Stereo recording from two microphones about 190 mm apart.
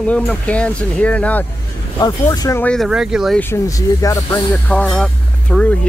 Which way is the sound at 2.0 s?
20° left (ahead or behind).